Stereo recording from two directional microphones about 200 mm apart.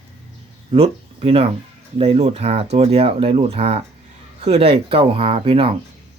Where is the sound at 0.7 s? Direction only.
30° right (ahead or behind).